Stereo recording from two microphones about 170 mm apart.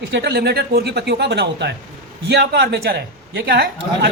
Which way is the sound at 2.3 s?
70° right (ahead or behind).